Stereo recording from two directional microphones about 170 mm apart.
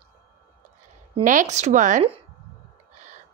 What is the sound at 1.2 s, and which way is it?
Speech, 50° right (ahead or behind).